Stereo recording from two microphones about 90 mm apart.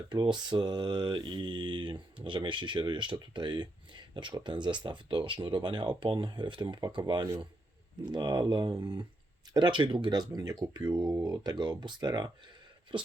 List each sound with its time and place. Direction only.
0.1 s mantra: 50° right (ahead or behind)
8.1 s speech: 55° right (ahead or behind)
12.9 s speech: 70° right (ahead or behind)